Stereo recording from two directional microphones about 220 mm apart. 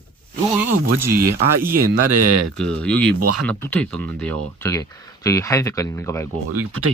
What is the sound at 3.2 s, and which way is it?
Speech, 90° right.